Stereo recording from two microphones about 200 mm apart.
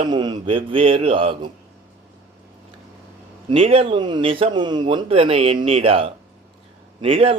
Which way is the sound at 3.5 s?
30° right (ahead or behind).